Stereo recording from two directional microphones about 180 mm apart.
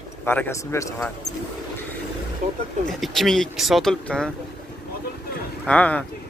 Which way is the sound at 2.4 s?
50° right (ahead or behind).